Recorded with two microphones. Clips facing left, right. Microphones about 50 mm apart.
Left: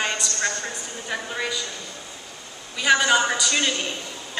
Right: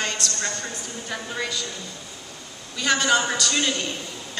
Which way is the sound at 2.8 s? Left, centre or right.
Centre.